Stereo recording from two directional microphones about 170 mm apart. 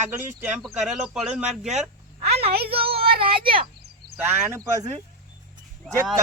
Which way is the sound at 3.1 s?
60° right (ahead or behind).